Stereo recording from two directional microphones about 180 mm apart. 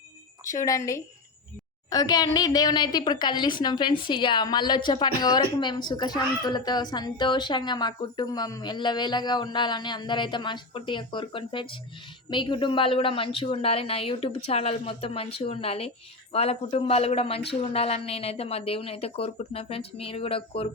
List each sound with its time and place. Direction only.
0.5 s a woman's voice: 15° left (ahead or behind)